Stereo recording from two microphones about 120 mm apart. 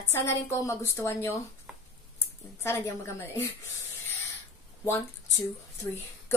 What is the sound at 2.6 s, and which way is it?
Speech, 25° left (ahead or behind).